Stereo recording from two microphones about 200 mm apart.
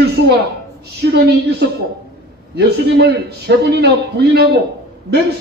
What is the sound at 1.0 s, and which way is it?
A man's voice, 55° right (ahead or behind).